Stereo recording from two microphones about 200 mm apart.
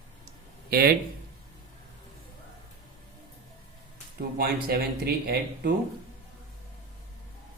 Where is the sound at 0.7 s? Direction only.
50° right (ahead or behind).